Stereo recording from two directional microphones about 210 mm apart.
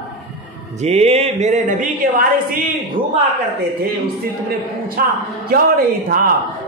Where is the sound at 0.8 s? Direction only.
30° right (ahead or behind).